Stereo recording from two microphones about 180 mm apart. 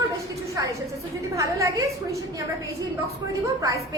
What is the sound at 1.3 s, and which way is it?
Speech, 15° right (ahead or behind).